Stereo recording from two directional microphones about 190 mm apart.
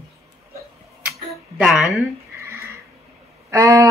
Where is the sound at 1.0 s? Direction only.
5° right (ahead or behind).